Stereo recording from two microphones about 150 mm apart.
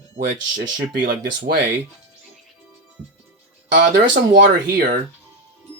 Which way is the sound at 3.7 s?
70° right (ahead or behind).